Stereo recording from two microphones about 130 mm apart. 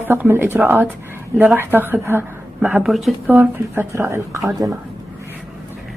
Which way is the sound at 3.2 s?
15° right (ahead or behind).